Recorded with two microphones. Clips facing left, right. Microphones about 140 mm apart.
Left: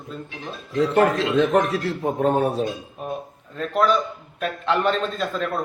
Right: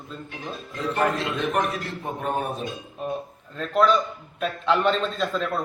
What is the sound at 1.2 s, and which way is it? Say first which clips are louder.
A man's voice: left 6 dB; 90° left.